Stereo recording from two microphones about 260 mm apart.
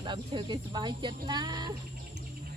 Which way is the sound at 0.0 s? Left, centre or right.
Centre.